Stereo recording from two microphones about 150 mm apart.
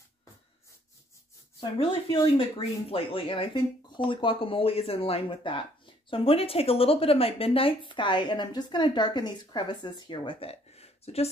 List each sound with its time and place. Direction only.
1.6 s speech: 35° left (ahead or behind)